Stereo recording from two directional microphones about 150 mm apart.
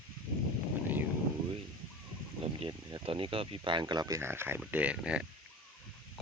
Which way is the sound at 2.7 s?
30° right (ahead or behind).